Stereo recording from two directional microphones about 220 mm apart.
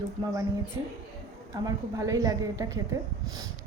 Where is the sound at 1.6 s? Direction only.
15° right (ahead or behind).